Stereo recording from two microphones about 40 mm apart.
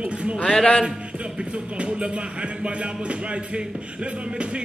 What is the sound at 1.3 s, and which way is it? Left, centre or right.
Music, right.